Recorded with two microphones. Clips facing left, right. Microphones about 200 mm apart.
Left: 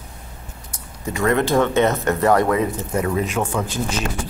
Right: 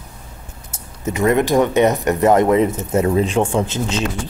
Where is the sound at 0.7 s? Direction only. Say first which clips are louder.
Right 4 dB; 20° right (ahead or behind).